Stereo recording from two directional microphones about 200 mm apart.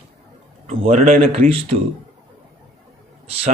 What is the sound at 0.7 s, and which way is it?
Speech, 30° right (ahead or behind).